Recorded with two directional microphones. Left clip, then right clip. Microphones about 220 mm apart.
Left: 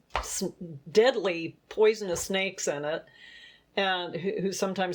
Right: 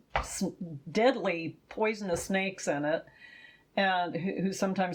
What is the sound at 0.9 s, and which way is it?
Speech, 40° left (ahead or behind).